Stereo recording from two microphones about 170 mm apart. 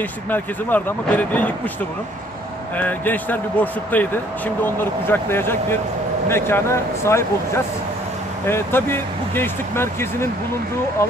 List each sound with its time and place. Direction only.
0.3 s speech: 10° left (ahead or behind)
2.8 s speech: 10° left (ahead or behind)